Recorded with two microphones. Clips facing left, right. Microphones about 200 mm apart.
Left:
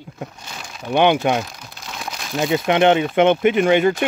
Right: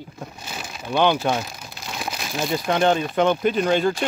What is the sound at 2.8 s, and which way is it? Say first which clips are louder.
Speech: left 4 dB; 75° left (ahead or behind).